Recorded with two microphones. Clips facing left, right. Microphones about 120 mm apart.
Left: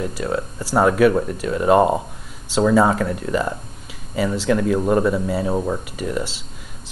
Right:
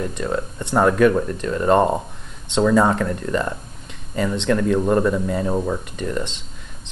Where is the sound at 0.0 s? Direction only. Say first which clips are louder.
Even; 5° left (ahead or behind).